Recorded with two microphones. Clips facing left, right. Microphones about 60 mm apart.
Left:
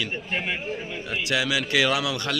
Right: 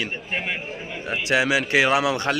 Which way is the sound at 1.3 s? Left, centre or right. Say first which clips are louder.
Right 4 dB; right.